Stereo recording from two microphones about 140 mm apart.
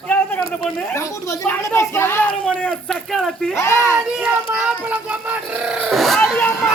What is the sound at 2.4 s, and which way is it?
Speech, 5° left (ahead or behind).